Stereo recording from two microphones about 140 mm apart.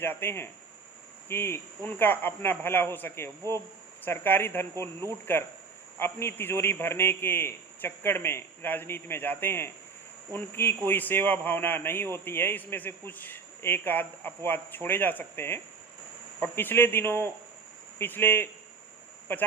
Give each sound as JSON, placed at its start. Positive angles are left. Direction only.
{"t": 0.0, "sound": "a man's voice", "side_deg": 15}